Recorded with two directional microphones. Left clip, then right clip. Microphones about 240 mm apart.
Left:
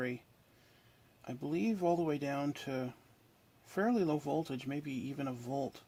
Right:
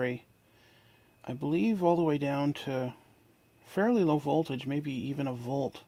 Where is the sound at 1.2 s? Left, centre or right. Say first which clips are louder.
Right 6 dB; right.